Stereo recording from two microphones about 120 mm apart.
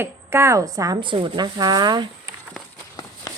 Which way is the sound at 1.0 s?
45° right (ahead or behind).